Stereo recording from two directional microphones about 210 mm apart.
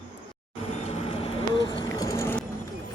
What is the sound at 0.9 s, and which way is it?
Vehicle, 25° left (ahead or behind).